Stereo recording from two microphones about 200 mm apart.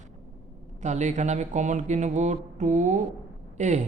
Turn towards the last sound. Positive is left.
turn(degrees=-35)  # may be behind; listen again after turning